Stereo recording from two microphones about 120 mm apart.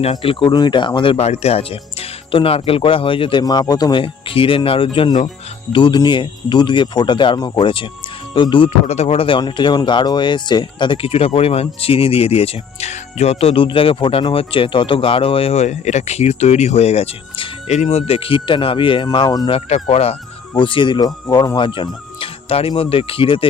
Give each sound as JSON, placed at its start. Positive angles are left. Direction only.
{"t": 0.0, "sound": "speech", "side_deg": 55}
{"t": 1.1, "sound": "speech", "side_deg": 60}
{"t": 3.4, "sound": "speech", "side_deg": 35}
{"t": 4.0, "sound": "speech", "side_deg": 50}
{"t": 8.9, "sound": "speech", "side_deg": 60}
{"t": 17.7, "sound": "speech", "side_deg": 65}
{"t": 19.5, "sound": "speech", "side_deg": 60}
{"t": 20.6, "sound": "speech", "side_deg": 45}